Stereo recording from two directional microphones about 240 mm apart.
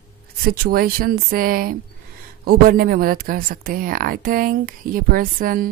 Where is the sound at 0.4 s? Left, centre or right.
Right.